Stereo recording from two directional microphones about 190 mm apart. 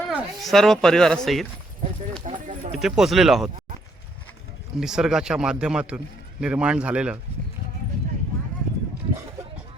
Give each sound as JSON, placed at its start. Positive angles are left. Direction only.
{"t": 0.1, "sound": "speech", "side_deg": -10}
{"t": 2.2, "sound": "a sound", "side_deg": -35}
{"t": 2.7, "sound": "speech", "side_deg": 0}
{"t": 4.8, "sound": "speech", "side_deg": -5}